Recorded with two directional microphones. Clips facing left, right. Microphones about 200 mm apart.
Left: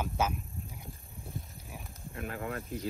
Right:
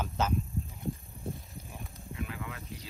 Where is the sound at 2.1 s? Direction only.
50° left (ahead or behind).